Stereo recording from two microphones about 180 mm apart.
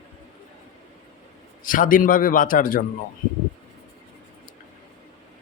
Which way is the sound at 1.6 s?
50° left (ahead or behind).